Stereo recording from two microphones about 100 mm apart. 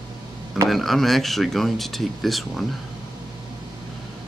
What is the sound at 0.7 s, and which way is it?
Speech, centre (ahead or behind).